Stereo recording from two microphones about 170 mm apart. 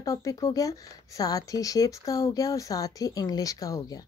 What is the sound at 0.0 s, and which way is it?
Speech, 20° left (ahead or behind).